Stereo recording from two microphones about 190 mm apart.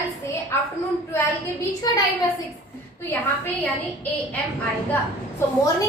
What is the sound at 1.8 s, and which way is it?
Speech, 20° left (ahead or behind).